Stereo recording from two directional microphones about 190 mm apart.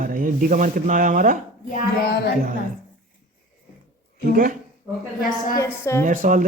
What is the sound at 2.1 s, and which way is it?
Speech, 55° left (ahead or behind).